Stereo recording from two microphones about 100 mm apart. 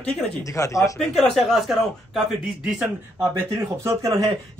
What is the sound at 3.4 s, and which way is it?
Speech, 30° right (ahead or behind).